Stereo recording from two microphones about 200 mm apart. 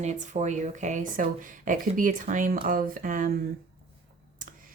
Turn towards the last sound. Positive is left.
turn(degrees=-45)  # may be behind; listen again after turning